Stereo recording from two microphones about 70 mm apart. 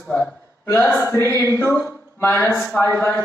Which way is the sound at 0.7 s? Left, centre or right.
Left.